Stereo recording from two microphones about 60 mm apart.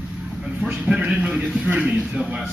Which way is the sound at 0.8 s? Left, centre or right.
Centre.